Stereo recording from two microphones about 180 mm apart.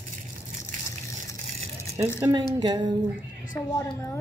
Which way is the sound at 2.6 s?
25° right (ahead or behind).